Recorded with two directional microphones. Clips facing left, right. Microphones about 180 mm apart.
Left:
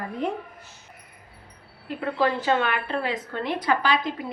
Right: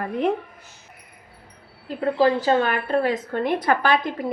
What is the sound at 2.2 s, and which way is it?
A woman's voice, 35° right (ahead or behind).